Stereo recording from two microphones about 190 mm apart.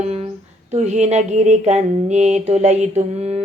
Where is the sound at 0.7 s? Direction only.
35° right (ahead or behind).